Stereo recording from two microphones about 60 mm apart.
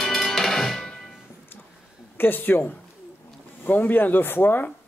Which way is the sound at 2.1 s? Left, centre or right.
Left.